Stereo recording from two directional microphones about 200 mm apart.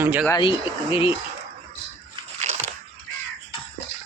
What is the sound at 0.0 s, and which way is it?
Speech, 10° right (ahead or behind).